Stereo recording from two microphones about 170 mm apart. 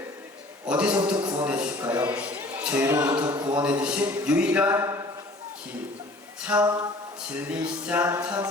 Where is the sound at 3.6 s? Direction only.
5° right (ahead or behind).